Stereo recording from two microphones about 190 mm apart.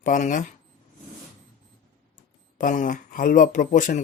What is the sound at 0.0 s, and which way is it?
Speech, 40° left (ahead or behind).